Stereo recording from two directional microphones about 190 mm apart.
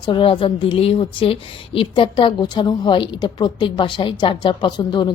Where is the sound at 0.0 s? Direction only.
25° left (ahead or behind).